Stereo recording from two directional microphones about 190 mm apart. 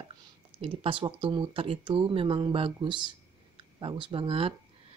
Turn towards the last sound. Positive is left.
turn(degrees=-30)  # may be behind; listen again after turning